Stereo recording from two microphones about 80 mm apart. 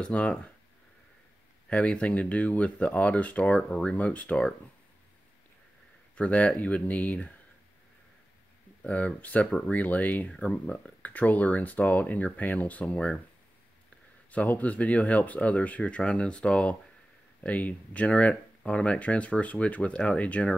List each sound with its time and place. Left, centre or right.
0.0 s speech: centre
1.7 s speech: centre
6.1 s speech: centre
8.8 s speech: centre
14.3 s speech: centre